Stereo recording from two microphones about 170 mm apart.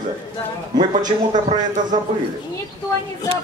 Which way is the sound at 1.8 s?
25° right (ahead or behind).